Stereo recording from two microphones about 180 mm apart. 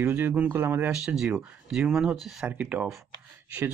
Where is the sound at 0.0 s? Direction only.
10° right (ahead or behind).